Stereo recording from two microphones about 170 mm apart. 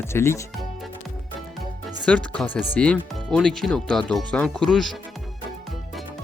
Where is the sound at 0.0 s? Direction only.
15° left (ahead or behind).